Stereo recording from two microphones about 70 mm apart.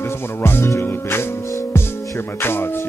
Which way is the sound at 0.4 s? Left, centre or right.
Left.